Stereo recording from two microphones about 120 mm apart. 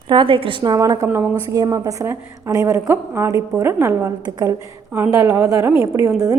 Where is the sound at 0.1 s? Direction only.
45° right (ahead or behind).